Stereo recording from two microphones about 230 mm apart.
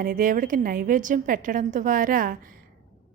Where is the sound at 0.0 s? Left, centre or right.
Right.